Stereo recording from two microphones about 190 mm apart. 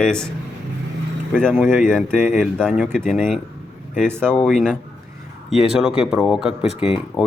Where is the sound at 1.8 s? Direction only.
Centre (ahead or behind).